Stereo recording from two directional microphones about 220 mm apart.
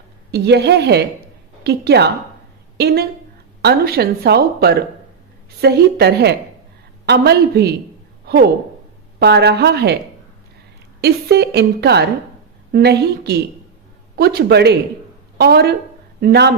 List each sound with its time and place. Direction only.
0.3 s speech: 50° right (ahead or behind)
8.2 s a sound: 45° right (ahead or behind)
9.1 s speech: 50° right (ahead or behind)
11.0 s speech: 50° right (ahead or behind)